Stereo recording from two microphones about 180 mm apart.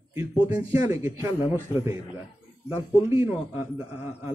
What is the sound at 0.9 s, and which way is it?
A man's voice, 15° right (ahead or behind).